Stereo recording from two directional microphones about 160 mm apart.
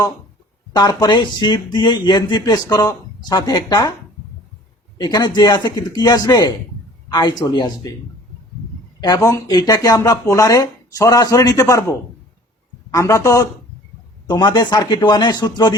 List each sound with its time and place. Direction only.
0.7 s speech: 25° left (ahead or behind)
4.9 s speech: 25° left (ahead or behind)
9.0 s speech: 20° left (ahead or behind)